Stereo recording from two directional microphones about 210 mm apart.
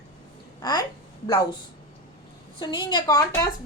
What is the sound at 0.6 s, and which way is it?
Speech, 20° left (ahead or behind).